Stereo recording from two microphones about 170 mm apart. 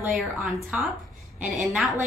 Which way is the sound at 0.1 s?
5° right (ahead or behind).